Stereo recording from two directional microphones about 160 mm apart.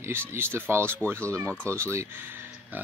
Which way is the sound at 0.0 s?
15° right (ahead or behind).